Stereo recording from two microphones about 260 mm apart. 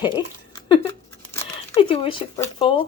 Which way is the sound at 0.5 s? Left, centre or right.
Centre.